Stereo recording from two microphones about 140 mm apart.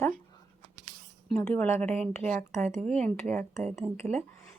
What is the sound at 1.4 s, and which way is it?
Speech, 15° left (ahead or behind).